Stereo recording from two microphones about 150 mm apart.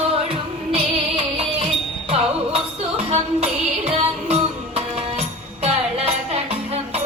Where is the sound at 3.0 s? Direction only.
45° right (ahead or behind).